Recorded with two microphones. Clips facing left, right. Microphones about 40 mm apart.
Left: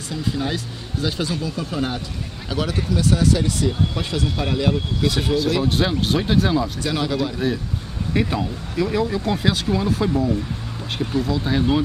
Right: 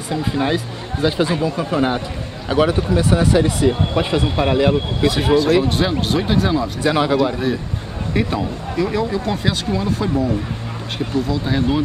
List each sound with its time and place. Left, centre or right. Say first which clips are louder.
0.1 s speech: right 5 dB; right; by 6.7 s centre
6.8 s speech: right 6 dB; right
7.4 s speech: right 2 dB; centre